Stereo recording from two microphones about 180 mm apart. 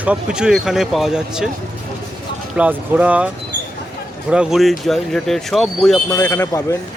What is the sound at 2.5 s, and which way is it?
Speech, 10° right (ahead or behind).